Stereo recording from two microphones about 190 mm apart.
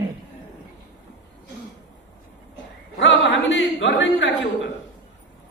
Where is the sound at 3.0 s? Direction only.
75° left (ahead or behind).